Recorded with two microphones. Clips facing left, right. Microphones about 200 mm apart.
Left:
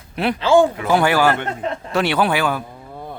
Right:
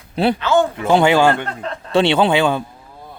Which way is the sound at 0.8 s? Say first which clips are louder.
Right 3 dB; 25° right (ahead or behind).